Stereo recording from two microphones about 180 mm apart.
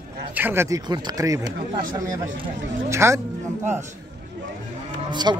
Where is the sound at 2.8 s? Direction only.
15° right (ahead or behind).